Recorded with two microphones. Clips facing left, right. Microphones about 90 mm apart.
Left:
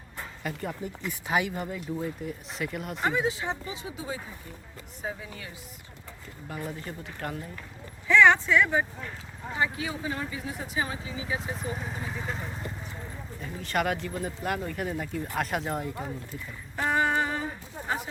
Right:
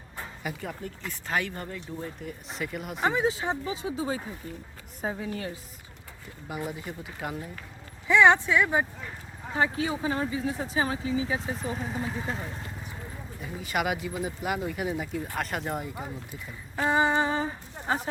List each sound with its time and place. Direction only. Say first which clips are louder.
0.4 s speech: left 2 dB; centre (ahead or behind)
3.1 s speech: right 2 dB; 25° right (ahead or behind)
5.0 s speech: right 5 dB; 40° right (ahead or behind)
6.5 s speech: right 2 dB; 10° right (ahead or behind)
9.6 s speech: right 3 dB; 30° right (ahead or behind)
11.5 s speech: right 2 dB; centre (ahead or behind)
16.3 s horse: even; 15° right (ahead or behind)
17.8 s a sound: right 3 dB; 35° right (ahead or behind)